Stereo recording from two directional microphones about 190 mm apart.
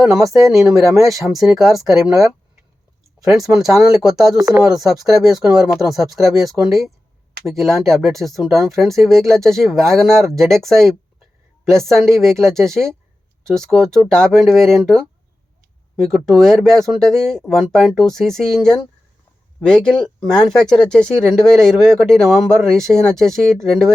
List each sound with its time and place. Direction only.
0.0 s speech: centre (ahead or behind)
4.4 s speech: 15° right (ahead or behind)
4.6 s speech: centre (ahead or behind)